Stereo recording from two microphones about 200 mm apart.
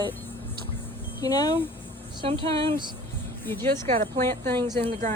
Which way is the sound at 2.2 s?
25° right (ahead or behind).